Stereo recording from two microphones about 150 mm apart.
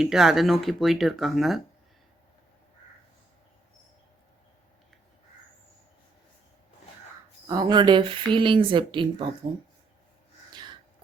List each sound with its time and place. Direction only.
0.0 s speech: centre (ahead or behind)
7.4 s speech: 25° right (ahead or behind)
10.5 s a sound: 30° right (ahead or behind)